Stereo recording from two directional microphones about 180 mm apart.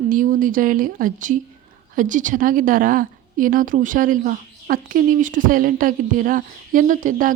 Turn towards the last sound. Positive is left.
turn(degrees=-45)  # may be behind; listen again after turning